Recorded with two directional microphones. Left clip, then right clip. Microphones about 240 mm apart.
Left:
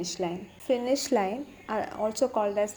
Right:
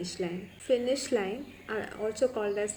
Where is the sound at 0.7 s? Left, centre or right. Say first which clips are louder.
Left 2 dB; centre.